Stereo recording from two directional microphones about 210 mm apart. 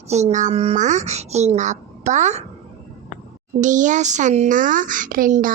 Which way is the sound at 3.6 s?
35° right (ahead or behind).